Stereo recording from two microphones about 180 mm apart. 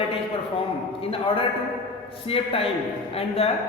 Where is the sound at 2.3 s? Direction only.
30° left (ahead or behind).